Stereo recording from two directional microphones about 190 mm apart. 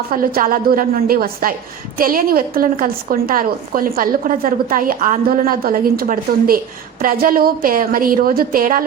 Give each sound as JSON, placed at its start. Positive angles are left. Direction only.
{"t": 0.1, "sound": "a woman's voice", "side_deg": -50}